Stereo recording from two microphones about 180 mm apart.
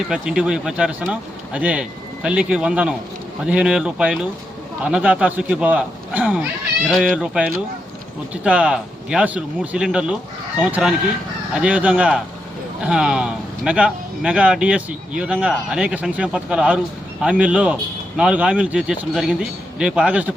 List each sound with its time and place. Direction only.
0.1 s speech: 5° right (ahead or behind)